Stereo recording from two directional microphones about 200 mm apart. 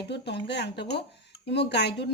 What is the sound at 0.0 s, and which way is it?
A woman's voice, 60° left (ahead or behind).